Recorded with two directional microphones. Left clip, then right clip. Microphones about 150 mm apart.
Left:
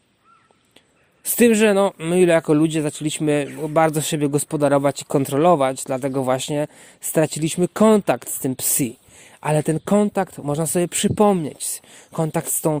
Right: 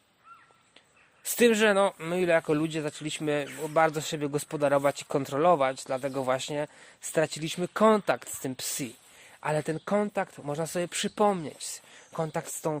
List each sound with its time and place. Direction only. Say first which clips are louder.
1.2 s speech: left 7 dB; 35° left (ahead or behind)
2.0 s speech: left 9 dB; 55° left (ahead or behind)